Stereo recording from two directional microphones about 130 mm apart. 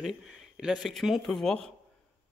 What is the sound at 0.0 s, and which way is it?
Speech, 5° right (ahead or behind).